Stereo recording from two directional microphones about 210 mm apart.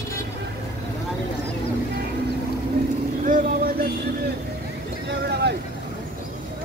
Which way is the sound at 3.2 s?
40° right (ahead or behind).